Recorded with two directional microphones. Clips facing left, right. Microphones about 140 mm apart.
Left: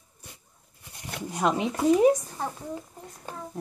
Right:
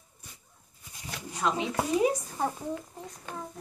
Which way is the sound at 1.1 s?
50° left (ahead or behind).